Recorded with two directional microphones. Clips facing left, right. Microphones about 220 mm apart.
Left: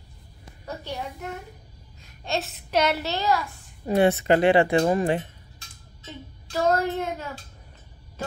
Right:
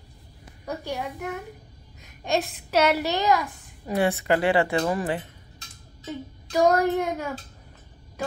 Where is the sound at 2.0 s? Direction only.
15° right (ahead or behind).